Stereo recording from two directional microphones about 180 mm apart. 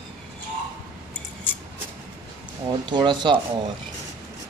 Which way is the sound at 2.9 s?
25° right (ahead or behind).